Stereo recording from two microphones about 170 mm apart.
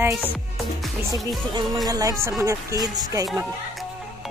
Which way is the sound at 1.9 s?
20° right (ahead or behind).